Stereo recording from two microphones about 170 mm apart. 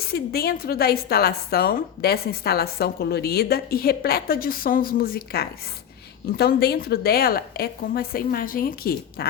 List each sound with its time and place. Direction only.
0.0 s a woman's voice: 65° left (ahead or behind)